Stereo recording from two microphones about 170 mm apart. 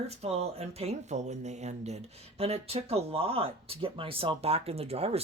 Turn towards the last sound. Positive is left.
turn(degrees=-35)  # may be behind; listen again after turning